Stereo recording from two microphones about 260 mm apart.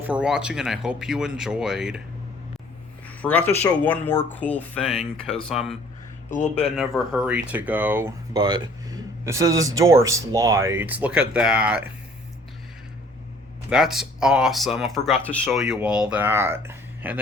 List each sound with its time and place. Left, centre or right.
0.0 s speech: centre
3.1 s speech: centre
6.3 s speech: left
6.7 s speech: centre
13.7 s speech: centre